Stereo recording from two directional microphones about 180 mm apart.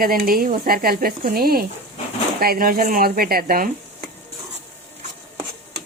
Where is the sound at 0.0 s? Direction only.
55° right (ahead or behind).